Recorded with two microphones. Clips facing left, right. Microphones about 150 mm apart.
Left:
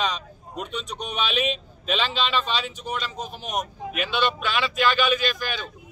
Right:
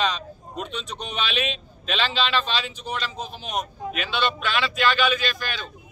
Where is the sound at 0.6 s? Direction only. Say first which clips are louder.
Even; 10° left (ahead or behind).